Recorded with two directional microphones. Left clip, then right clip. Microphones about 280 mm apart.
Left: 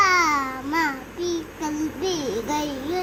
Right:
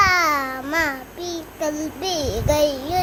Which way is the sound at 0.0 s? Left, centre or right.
Centre.